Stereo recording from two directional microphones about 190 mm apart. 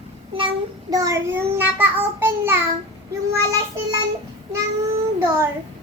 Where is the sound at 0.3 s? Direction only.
25° right (ahead or behind).